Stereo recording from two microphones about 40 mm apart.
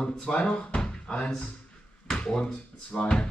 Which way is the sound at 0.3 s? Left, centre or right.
Left.